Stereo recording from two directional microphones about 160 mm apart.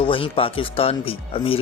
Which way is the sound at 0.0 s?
35° left (ahead or behind).